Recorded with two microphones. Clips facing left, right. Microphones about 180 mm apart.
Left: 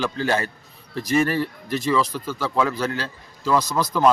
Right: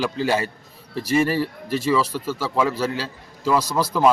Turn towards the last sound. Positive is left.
turn(degrees=-10)  # may be behind; listen again after turning